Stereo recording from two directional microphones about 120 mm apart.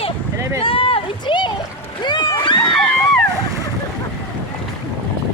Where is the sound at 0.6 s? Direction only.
50° left (ahead or behind).